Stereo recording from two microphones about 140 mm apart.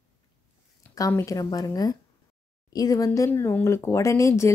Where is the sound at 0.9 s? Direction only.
25° left (ahead or behind).